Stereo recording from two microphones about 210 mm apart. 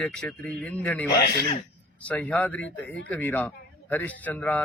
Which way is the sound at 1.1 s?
50° left (ahead or behind).